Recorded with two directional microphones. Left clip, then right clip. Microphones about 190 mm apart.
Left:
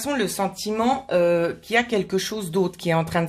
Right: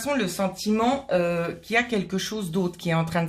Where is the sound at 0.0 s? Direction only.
35° left (ahead or behind).